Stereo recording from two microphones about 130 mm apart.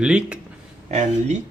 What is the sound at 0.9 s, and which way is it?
Speech, 65° right (ahead or behind).